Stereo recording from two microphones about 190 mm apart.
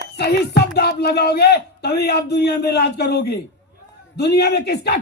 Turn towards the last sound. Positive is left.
turn(degrees=60)  # may be behind; listen again after turning